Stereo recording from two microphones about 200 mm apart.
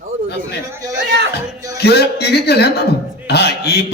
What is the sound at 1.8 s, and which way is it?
A man's voice, 55° left (ahead or behind).